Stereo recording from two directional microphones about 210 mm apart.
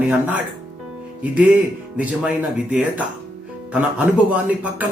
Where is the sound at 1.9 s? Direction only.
5° right (ahead or behind).